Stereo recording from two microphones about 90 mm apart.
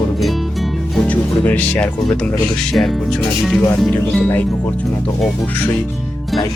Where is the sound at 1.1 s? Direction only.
20° left (ahead or behind); by 4.2 s 5° left (ahead or behind).